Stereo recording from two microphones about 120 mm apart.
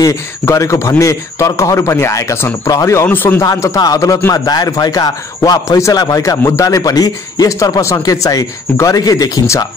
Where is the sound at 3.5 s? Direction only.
25° left (ahead or behind).